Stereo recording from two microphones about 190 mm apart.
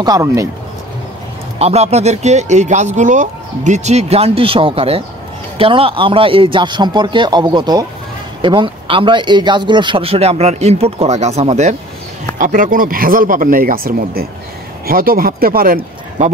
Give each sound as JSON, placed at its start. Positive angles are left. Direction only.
{"t": 0.0, "sound": "speech", "side_deg": -15}
{"t": 1.6, "sound": "a man's voice", "side_deg": -35}